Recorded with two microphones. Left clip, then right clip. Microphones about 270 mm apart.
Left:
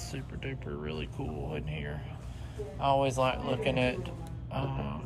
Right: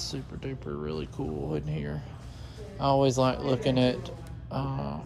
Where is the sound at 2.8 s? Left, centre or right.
Right.